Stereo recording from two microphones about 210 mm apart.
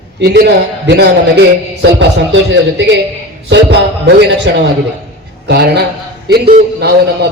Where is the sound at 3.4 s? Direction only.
55° right (ahead or behind).